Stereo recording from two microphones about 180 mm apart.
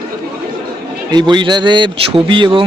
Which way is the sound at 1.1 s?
25° right (ahead or behind).